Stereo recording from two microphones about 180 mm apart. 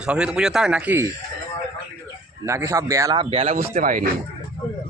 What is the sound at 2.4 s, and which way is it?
Speech, 15° right (ahead or behind).